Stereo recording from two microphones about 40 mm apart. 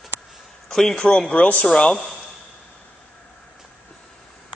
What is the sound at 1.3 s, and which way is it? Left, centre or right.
Speech, left.